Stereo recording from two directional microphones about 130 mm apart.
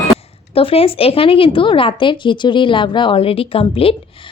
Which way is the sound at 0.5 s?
45° left (ahead or behind).